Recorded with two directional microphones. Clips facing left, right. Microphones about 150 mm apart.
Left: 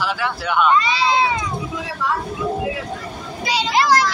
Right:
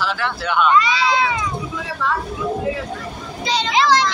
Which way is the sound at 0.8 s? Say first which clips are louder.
Even; 25° left (ahead or behind).